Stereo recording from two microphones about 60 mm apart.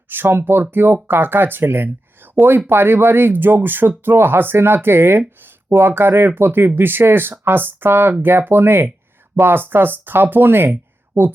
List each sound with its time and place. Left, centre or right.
0.1 s speech: right